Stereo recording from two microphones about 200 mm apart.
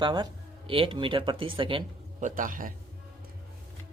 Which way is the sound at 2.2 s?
40° right (ahead or behind).